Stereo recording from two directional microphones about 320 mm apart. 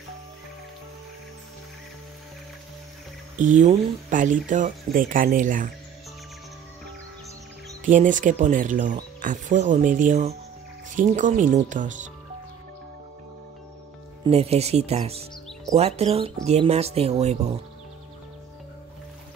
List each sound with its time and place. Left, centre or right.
3.3 s speech: right
7.8 s speech: right
14.2 s speech: centre